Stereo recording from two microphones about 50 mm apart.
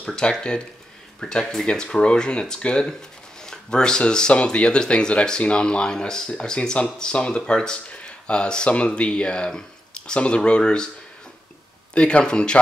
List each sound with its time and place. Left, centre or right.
0.0 s speech: centre
11.9 s speech: left